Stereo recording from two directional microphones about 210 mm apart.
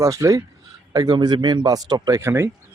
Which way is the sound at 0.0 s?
15° right (ahead or behind).